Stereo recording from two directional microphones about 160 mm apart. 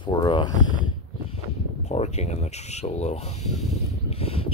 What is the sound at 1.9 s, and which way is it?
Speech, 45° left (ahead or behind).